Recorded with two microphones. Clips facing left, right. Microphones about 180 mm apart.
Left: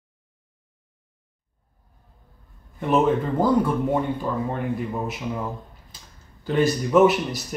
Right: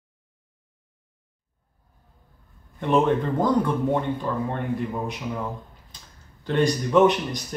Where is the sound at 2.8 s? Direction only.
5° left (ahead or behind).